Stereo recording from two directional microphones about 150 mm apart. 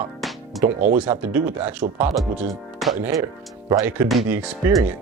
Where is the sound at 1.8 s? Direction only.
40° right (ahead or behind).